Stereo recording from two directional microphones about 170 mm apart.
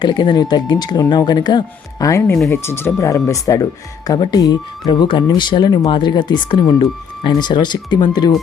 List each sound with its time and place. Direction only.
0.0 s speech: 25° left (ahead or behind)